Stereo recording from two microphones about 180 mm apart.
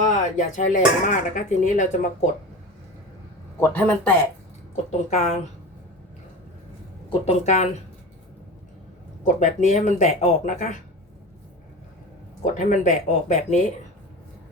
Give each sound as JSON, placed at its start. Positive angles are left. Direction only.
{"t": 0.0, "sound": "speech", "side_deg": 40}
{"t": 3.6, "sound": "speech", "side_deg": 10}
{"t": 4.9, "sound": "speech", "side_deg": 40}
{"t": 7.1, "sound": "speech", "side_deg": 40}
{"t": 9.2, "sound": "speech", "side_deg": 40}
{"t": 12.5, "sound": "speech", "side_deg": 45}